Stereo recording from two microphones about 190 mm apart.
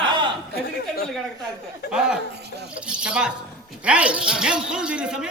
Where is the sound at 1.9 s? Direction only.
5° right (ahead or behind).